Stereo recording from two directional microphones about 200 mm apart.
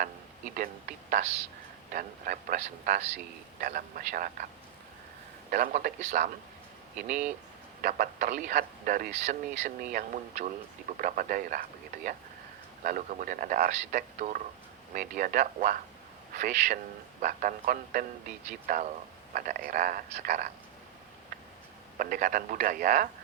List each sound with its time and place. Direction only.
0.5 s a man's voice: 45° right (ahead or behind)
5.5 s a man's voice: 45° right (ahead or behind)
7.8 s speech: 45° right (ahead or behind)
12.8 s a man's voice: 40° right (ahead or behind)
21.9 s speech: 45° right (ahead or behind)